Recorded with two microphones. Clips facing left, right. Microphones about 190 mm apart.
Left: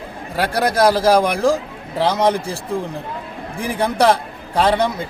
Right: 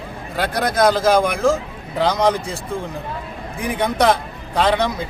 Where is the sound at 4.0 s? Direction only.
30° left (ahead or behind).